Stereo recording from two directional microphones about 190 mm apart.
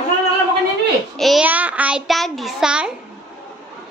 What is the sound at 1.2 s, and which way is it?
A child's voice, centre (ahead or behind).